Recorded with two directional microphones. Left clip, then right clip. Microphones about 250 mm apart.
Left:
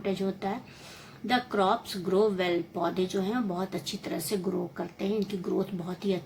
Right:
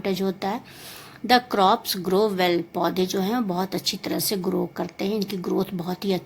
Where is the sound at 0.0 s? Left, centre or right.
Right.